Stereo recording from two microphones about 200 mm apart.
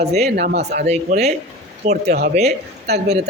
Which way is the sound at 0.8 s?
35° right (ahead or behind).